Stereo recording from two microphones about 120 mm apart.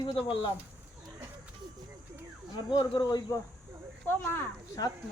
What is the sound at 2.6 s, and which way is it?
Speech, 40° left (ahead or behind).